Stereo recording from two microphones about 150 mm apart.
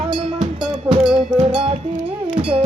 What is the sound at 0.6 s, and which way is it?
Music, 30° right (ahead or behind).